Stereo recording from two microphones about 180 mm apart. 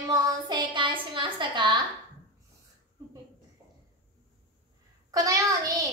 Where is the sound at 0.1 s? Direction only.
25° right (ahead or behind).